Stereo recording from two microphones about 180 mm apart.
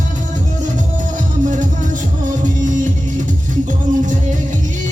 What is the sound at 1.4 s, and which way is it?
Music, 45° right (ahead or behind).